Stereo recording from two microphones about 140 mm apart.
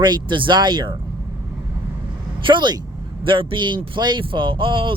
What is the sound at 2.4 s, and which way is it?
Speech, 35° right (ahead or behind).